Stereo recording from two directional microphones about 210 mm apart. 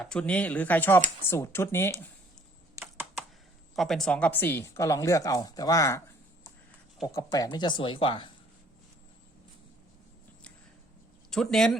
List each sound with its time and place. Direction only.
0.0 s speech: 5° left (ahead or behind)
2.7 s computer keyboard: 10° right (ahead or behind)
3.8 s speech: centre (ahead or behind)
7.1 s speech: 15° left (ahead or behind)
11.3 s speech: centre (ahead or behind)